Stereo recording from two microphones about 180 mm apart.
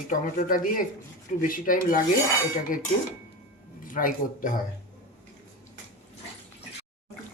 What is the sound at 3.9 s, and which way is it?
Dishes, 50° left (ahead or behind).